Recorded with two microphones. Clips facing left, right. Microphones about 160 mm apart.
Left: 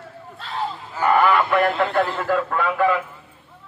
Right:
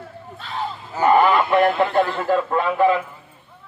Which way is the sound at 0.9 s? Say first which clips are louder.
Right 2 dB; 20° right (ahead or behind).